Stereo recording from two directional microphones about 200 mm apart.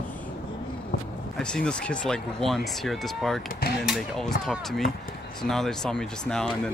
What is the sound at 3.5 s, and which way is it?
Speech, 50° left (ahead or behind).